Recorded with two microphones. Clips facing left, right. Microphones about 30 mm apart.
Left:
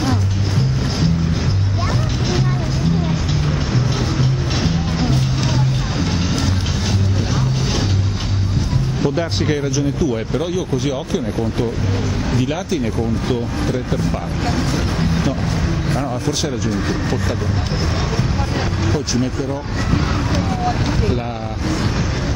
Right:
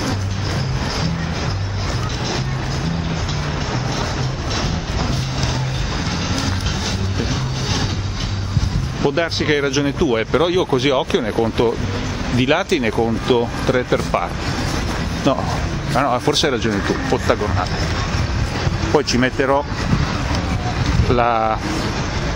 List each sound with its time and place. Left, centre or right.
9.0 s speech: right
12.4 s speech: right
15.9 s speech: right
16.3 s speech: right
16.7 s speech: right
18.9 s speech: right
21.2 s speech: right